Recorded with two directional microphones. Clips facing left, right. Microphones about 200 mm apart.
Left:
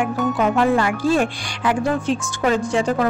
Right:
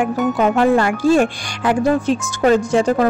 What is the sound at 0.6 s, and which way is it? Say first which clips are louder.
Speech: right 4 dB; 45° right (ahead or behind).